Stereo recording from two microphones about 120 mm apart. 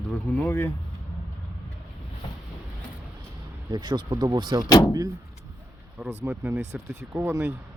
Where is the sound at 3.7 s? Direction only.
40° right (ahead or behind).